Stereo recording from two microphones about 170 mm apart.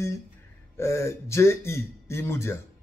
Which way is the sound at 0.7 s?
15° left (ahead or behind).